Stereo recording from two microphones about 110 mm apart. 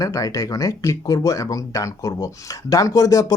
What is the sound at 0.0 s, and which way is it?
Speech, 30° left (ahead or behind).